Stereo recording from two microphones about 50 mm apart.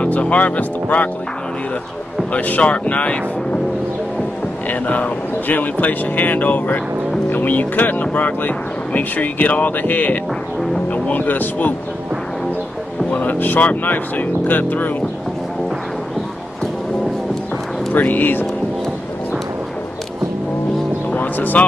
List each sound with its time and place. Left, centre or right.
0.0 s speech: left
2.3 s speech: left
4.6 s speech: left
13.1 s speech: left
17.9 s speech: left
21.1 s music: left